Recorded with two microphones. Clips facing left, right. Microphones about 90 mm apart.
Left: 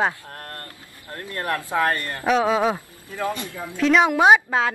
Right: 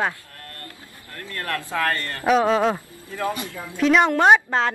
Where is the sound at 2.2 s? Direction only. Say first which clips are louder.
Right 1 dB; centre (ahead or behind).